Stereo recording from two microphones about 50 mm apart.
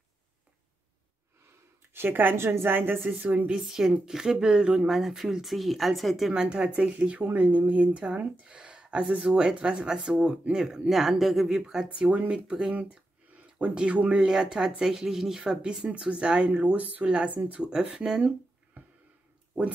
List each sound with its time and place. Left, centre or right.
2.0 s a woman's voice: right
3.1 s speech: right
3.5 s speech: centre
6.3 s speech: centre
7.2 s speech: right
13.4 s a sound: right
13.7 s speech: right
14.2 s speech: centre; by 17.6 s right
17.6 s speech: centre